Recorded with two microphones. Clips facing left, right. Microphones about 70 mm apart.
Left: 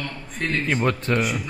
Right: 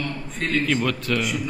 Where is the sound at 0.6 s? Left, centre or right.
Left.